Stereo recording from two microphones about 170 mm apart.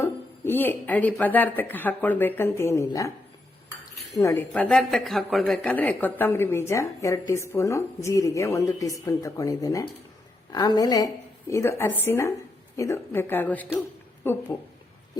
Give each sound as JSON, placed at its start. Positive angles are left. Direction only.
{"t": 0.0, "sound": "speech", "side_deg": 15}
{"t": 4.2, "sound": "speech", "side_deg": 15}